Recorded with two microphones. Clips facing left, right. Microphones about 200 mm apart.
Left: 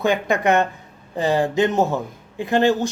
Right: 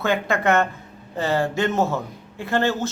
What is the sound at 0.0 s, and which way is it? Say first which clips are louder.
A woman's voice: left 2 dB; 15° left (ahead or behind).